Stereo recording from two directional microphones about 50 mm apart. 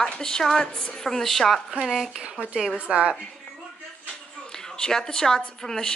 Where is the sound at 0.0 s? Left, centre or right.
Centre.